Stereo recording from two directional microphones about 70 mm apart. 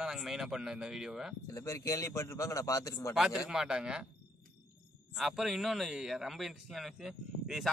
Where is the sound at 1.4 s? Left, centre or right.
Left.